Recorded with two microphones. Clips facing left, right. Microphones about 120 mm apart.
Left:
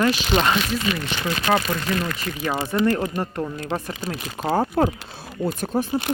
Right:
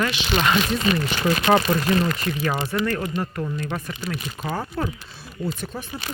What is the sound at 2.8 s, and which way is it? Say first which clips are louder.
Speech: left 3 dB; 25° left (ahead or behind).